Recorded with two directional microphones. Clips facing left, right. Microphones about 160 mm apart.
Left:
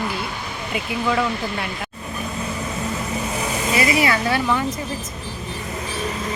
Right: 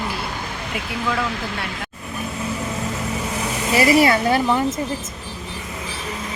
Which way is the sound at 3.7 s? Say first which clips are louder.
Right 5 dB; 35° right (ahead or behind).